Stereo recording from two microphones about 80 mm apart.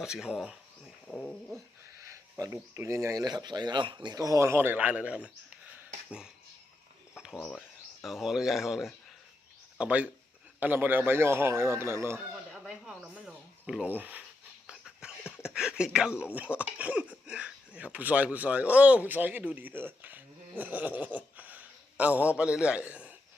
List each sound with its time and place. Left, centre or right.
0.0 s speech: centre
2.7 s speech: right
3.2 s speech: right
4.2 s a man's voice: right; by 6.3 s centre
7.3 s speech: centre
8.0 s speech: centre
9.7 s a man's voice: centre; by 12.1 s right
12.3 s a sound: centre
13.8 s a man's voice: right
14.7 s a sound: centre
15.4 s speech: centre